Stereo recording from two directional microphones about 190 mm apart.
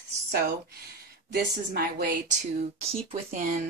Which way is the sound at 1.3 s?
55° right (ahead or behind).